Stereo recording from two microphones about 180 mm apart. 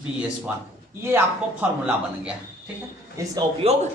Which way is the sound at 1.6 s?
5° right (ahead or behind).